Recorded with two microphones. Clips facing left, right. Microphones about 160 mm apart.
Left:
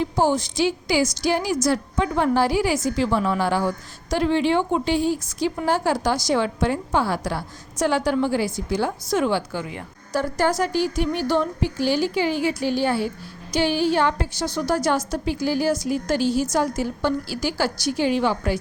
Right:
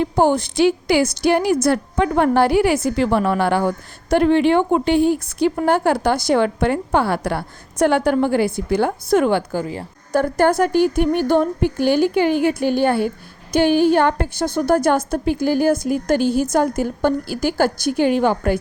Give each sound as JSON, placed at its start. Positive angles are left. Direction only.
{"t": 0.0, "sound": "a woman's voice", "side_deg": -55}
{"t": 10.1, "sound": "a woman's voice", "side_deg": -55}